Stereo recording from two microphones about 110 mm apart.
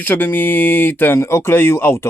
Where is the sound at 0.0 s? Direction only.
15° left (ahead or behind).